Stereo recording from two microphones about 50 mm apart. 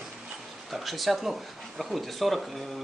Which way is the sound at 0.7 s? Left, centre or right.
Centre.